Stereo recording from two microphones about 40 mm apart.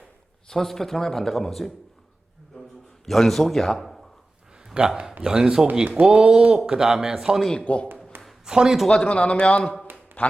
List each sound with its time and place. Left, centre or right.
0.4 s speech: centre
3.1 s a man's voice: centre
4.8 s speech: right
5.2 s speech: centre
6.1 s speech: right
7.6 s speech: left
8.1 s a sound: right
8.4 s speech: centre
9.0 s a man's voice: left
10.2 s speech: left